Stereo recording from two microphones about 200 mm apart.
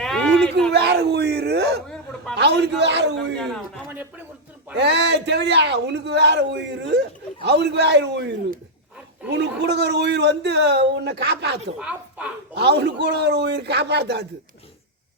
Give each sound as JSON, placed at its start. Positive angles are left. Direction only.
{"t": 0.0, "sound": "a sound", "side_deg": 5}
{"t": 0.7, "sound": "a man's voice", "side_deg": -55}
{"t": 3.3, "sound": "a man's voice", "side_deg": 5}
{"t": 4.8, "sound": "a man's voice", "side_deg": -60}
{"t": 11.8, "sound": "speech", "side_deg": -5}
{"t": 12.5, "sound": "a man's voice", "side_deg": -55}